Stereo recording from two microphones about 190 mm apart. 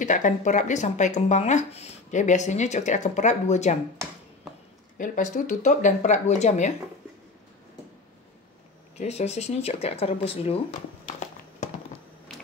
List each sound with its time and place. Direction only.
0.0 s speech: 40° left (ahead or behind)
4.9 s speech: 45° left (ahead or behind)
8.9 s speech: 35° left (ahead or behind)
11.1 s a sound: 40° left (ahead or behind)